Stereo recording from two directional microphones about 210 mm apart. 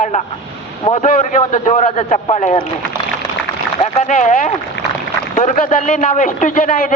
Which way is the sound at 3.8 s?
30° left (ahead or behind).